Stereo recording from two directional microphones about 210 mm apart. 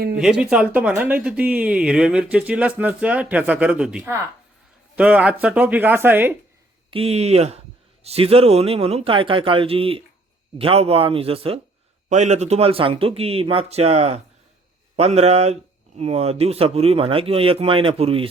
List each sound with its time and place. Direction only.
0.2 s speech: 5° right (ahead or behind)
6.9 s a man's voice: 30° right (ahead or behind)